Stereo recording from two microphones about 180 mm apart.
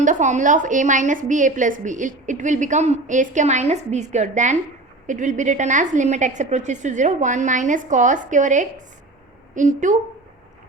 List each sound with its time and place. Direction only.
0.0 s a woman's voice: 45° right (ahead or behind)